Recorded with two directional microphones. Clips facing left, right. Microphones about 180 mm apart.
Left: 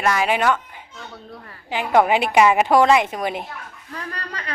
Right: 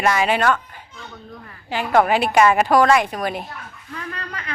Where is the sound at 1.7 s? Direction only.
15° left (ahead or behind).